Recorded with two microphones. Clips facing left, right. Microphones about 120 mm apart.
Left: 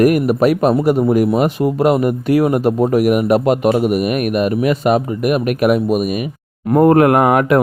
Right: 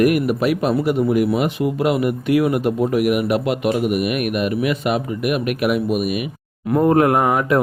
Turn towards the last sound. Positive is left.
turn(degrees=70)  # may be behind; listen again after turning